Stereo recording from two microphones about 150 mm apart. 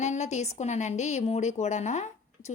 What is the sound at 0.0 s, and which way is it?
A woman's voice, 50° left (ahead or behind).